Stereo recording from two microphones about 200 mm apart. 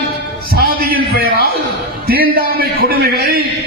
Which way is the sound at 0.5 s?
50° right (ahead or behind).